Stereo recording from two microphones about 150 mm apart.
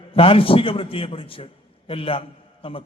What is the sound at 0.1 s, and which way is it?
A man's voice, 40° left (ahead or behind).